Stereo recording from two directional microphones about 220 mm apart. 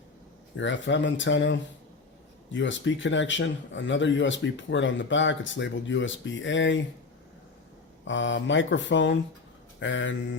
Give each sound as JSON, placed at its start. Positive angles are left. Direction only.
{"t": 0.5, "sound": "speech", "side_deg": 55}
{"t": 8.0, "sound": "speech", "side_deg": 55}